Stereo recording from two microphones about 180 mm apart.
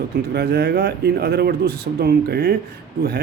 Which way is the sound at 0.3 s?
65° right (ahead or behind).